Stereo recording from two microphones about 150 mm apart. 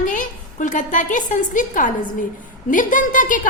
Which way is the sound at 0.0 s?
60° left (ahead or behind).